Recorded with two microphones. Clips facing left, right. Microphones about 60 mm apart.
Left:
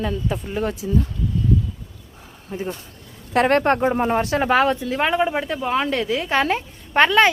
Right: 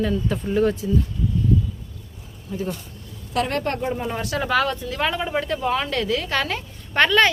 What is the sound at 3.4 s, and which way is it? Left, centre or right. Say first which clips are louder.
Speech: left 7 dB; left.